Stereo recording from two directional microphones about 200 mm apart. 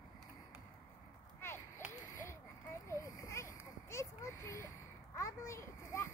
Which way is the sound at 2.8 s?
15° left (ahead or behind).